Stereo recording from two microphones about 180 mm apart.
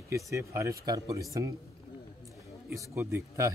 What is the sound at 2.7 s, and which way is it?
Speech, 15° right (ahead or behind).